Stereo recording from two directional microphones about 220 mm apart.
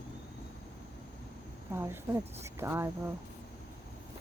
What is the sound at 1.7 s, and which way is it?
Speech, 10° right (ahead or behind).